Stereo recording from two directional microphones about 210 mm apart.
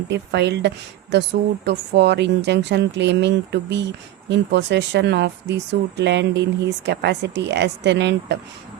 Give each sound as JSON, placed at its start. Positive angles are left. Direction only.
{"t": 0.1, "sound": "speech", "side_deg": -55}